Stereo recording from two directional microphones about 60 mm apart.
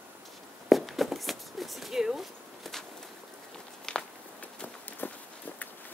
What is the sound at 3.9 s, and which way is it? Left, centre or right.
Walk, centre.